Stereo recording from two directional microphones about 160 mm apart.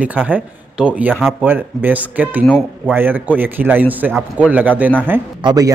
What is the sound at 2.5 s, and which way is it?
Speech, 5° left (ahead or behind).